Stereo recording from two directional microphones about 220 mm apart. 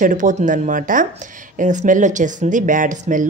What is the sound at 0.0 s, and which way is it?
Speech, 35° right (ahead or behind).